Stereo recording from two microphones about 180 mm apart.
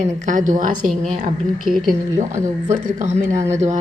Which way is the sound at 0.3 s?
45° right (ahead or behind).